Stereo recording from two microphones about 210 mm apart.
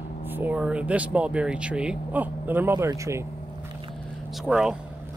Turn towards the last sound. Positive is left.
turn(degrees=-5)  # may be behind; listen again after turning